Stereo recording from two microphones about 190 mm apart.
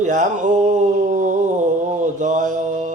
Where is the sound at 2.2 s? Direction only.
40° right (ahead or behind).